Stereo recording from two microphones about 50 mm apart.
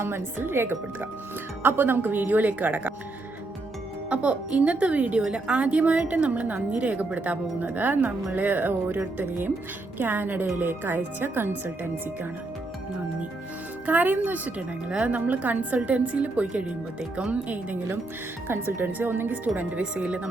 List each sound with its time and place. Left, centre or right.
0.0 s a woman's voice: right
4.1 s a woman's voice: right
10.0 s a woman's voice: right
13.8 s a woman's voice: right
14.8 s a woman's voice: centre
15.1 s a woman's voice: right
18.4 s speech: right
19.8 s a woman's voice: right